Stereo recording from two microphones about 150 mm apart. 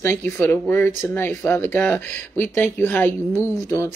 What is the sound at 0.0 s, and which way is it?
Speech, 15° left (ahead or behind).